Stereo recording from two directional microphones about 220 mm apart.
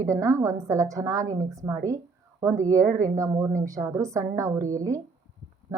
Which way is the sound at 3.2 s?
15° right (ahead or behind).